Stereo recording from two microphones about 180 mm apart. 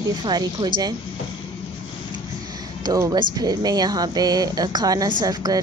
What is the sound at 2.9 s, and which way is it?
Speech, 20° right (ahead or behind).